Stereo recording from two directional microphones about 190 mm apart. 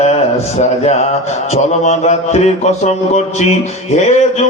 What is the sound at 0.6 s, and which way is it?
A man's voice, 35° left (ahead or behind).